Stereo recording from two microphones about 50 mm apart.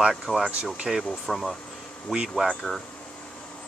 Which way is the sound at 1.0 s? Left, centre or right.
Centre.